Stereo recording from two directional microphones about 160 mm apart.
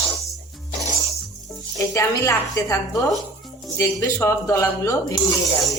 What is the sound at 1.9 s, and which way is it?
A woman's voice, 20° left (ahead or behind).